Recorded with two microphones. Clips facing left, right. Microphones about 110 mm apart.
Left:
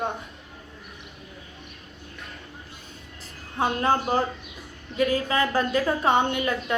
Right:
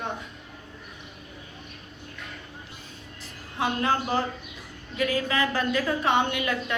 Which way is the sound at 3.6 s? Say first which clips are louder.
Left 2 dB; 30° left (ahead or behind).